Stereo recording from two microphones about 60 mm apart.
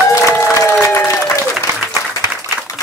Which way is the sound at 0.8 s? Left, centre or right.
Left.